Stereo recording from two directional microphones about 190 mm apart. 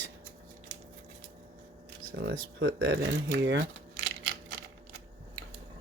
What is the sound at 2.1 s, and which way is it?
Speech, 55° right (ahead or behind).